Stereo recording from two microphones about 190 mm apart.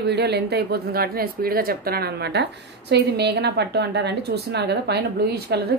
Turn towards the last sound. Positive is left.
turn(degrees=-60)  # may be behind; listen again after turning